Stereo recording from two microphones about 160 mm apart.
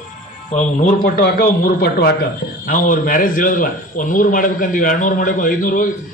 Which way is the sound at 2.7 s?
60° left (ahead or behind).